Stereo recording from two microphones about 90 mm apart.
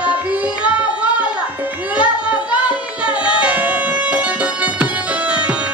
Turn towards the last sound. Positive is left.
turn(degrees=-15)  # may be behind; listen again after turning